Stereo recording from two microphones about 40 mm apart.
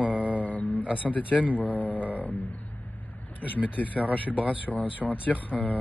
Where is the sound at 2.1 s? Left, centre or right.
Right.